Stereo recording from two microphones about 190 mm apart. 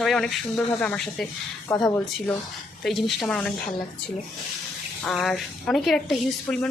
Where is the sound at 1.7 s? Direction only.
15° left (ahead or behind).